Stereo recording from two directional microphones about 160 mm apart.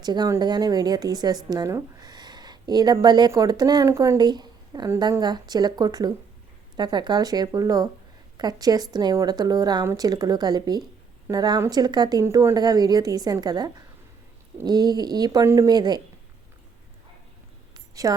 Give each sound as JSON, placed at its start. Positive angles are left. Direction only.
{"t": 0.0, "sound": "a woman's voice", "side_deg": -25}